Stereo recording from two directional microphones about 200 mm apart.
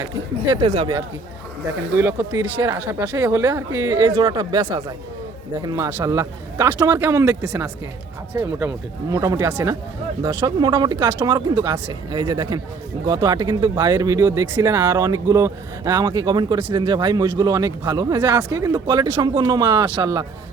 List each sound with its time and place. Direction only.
0.7 s speech: 30° right (ahead or behind)
2.0 s speech: 15° right (ahead or behind)